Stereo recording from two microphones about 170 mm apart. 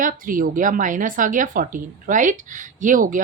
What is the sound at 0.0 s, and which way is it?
A woman's voice, 55° right (ahead or behind).